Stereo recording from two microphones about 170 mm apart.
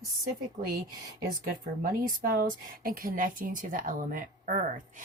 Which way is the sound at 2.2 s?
60° right (ahead or behind).